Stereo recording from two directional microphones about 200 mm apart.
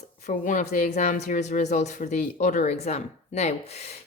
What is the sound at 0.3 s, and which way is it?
Speech, 40° left (ahead or behind).